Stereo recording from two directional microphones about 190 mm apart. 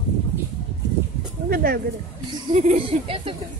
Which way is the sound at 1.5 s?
55° right (ahead or behind).